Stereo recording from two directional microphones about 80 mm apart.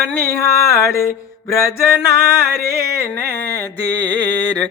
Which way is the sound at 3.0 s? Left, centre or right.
Left.